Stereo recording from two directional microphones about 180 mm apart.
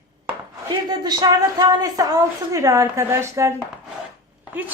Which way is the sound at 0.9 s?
20° right (ahead or behind).